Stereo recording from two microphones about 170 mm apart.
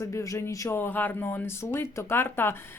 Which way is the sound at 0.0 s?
20° left (ahead or behind).